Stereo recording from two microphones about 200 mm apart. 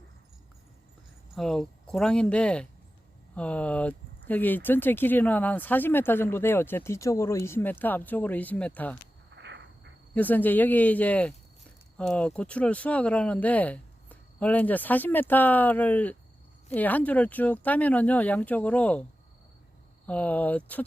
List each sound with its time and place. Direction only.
1.4 s speech: centre (ahead or behind)
9.3 s cricket: 60° right (ahead or behind)
10.2 s speech: 10° left (ahead or behind)
20.1 s speech: 10° left (ahead or behind)